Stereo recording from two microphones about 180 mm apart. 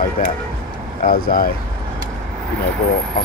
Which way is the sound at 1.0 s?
50° left (ahead or behind).